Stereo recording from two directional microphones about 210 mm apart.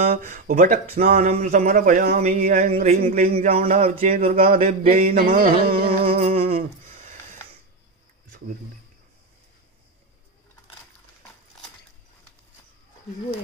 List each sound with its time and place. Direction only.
0.1 s speech: 35° right (ahead or behind)
5.0 s carnatic music: 45° right (ahead or behind)
6.1 s humming: 30° right (ahead or behind)